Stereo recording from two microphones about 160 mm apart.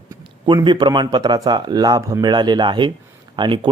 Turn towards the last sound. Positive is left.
turn(degrees=-30)  # may be behind; listen again after turning